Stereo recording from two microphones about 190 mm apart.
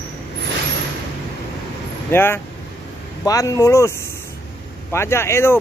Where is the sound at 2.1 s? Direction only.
10° left (ahead or behind).